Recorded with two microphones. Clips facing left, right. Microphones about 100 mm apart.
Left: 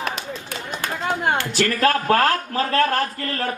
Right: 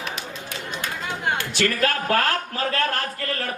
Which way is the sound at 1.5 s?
40° left (ahead or behind).